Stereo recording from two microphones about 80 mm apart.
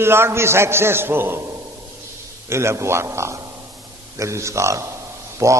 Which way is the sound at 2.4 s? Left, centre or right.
Right.